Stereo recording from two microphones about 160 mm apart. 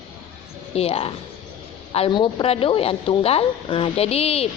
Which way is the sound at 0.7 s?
40° left (ahead or behind).